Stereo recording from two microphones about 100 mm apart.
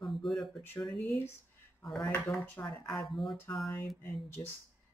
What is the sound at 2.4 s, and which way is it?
Speech, 20° left (ahead or behind).